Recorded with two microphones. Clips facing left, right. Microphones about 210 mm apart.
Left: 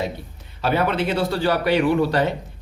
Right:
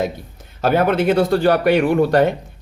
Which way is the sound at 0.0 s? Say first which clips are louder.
Right 5 dB; 45° right (ahead or behind).